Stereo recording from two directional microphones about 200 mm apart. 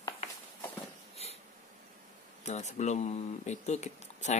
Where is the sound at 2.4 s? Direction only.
35° left (ahead or behind).